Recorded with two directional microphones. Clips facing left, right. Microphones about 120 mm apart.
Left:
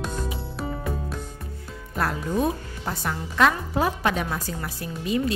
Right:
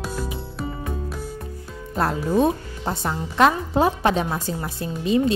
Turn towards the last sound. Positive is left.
turn(degrees=-25)  # may be behind; listen again after turning